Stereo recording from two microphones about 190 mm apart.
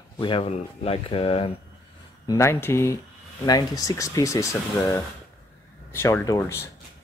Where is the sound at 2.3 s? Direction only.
15° left (ahead or behind).